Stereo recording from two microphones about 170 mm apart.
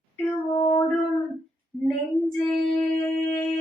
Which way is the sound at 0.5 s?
30° left (ahead or behind).